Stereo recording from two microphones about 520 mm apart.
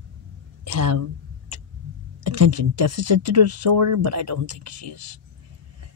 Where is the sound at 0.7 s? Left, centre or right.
Right.